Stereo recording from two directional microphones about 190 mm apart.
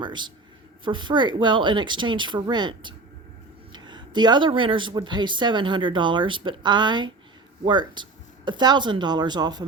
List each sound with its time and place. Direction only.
0.0 s speech: 25° right (ahead or behind)